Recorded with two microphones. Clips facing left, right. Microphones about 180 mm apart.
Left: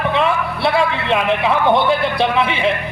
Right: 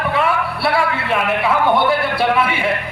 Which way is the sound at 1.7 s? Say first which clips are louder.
Left 1 dB; 20° left (ahead or behind).